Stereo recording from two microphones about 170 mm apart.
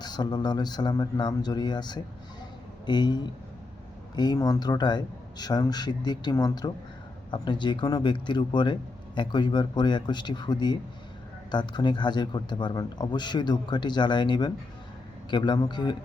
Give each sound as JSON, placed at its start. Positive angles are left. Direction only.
{"t": 0.0, "sound": "speech", "side_deg": 25}